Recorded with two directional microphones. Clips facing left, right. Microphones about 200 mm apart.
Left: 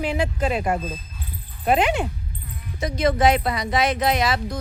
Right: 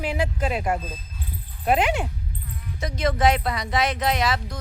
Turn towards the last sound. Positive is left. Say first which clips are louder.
# left 2 dB
turn(degrees=10)  # may be behind; listen again after turning